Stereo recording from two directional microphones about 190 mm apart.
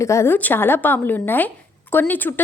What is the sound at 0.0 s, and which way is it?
A woman's voice, 15° left (ahead or behind).